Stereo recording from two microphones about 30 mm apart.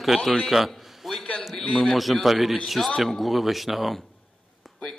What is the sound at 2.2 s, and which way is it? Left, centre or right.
A man's voice, centre.